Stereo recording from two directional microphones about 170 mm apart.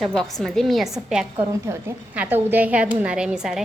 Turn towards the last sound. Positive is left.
turn(degrees=-5)  # may be behind; listen again after turning